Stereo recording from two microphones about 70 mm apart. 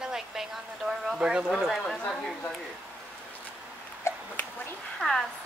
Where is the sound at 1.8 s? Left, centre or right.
Centre.